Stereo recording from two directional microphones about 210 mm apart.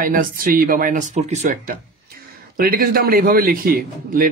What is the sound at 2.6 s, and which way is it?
A man's voice, 45° right (ahead or behind).